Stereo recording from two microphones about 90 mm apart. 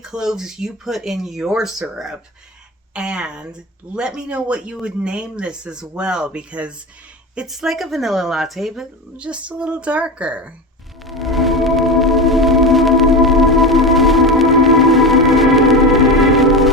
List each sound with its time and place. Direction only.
0.0 s speech: 5° right (ahead or behind)
2.9 s speech: 10° right (ahead or behind)
11.0 s music: centre (ahead or behind)